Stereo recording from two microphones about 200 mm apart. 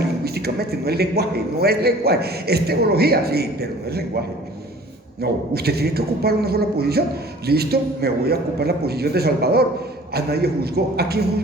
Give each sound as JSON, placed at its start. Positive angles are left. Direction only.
{"t": 0.3, "sound": "a man's voice", "side_deg": -50}
{"t": 5.2, "sound": "a man's voice", "side_deg": -50}